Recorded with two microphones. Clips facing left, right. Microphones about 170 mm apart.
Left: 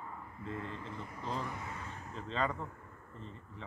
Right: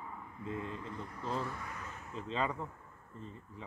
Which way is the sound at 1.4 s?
20° left (ahead or behind).